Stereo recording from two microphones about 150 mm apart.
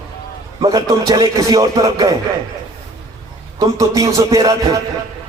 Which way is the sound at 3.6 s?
20° right (ahead or behind).